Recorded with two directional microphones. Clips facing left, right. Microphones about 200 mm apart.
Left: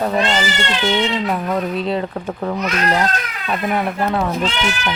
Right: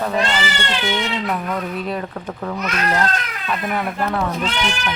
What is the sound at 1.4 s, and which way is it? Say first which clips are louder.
Speech: left 4 dB; 25° left (ahead or behind).